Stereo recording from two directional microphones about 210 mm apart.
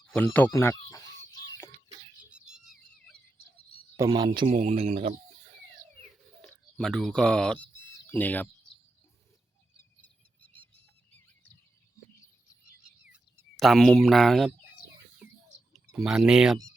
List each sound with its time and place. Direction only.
0.0 s a sound: 5° left (ahead or behind)
0.3 s speech: 10° left (ahead or behind)
3.9 s speech: 15° right (ahead or behind)
4.4 s speech: 30° right (ahead or behind)
6.4 s speech: centre (ahead or behind)
13.1 s a sound: 5° right (ahead or behind)
15.2 s bird: 5° right (ahead or behind)
16.0 s speech: 5° right (ahead or behind)